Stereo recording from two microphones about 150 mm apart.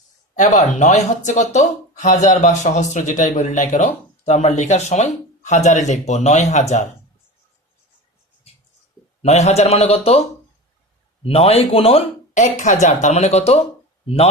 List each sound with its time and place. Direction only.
0.3 s speech: 50° left (ahead or behind)
9.2 s speech: 45° left (ahead or behind)